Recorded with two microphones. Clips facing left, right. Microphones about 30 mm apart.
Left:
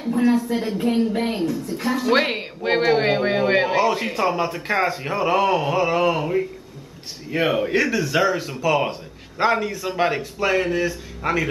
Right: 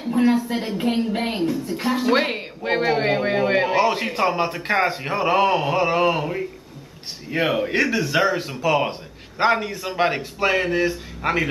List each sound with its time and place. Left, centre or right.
0.2 s speech: centre
2.1 s speech: centre
3.7 s a man's voice: centre
7.2 s a man's voice: centre; by 11.4 s right